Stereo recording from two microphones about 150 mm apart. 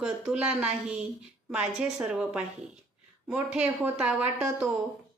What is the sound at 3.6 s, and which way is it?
A woman's voice, 10° right (ahead or behind).